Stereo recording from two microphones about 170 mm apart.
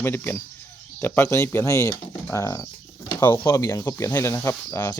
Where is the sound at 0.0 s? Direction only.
10° left (ahead or behind).